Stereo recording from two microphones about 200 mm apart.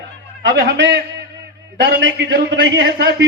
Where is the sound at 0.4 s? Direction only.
60° right (ahead or behind).